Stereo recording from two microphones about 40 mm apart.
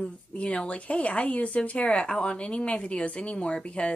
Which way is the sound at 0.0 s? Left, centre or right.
Left.